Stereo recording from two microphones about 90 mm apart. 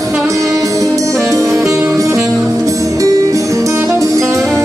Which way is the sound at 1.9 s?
35° right (ahead or behind).